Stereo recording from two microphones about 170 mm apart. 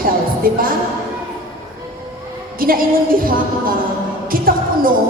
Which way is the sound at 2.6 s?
55° right (ahead or behind).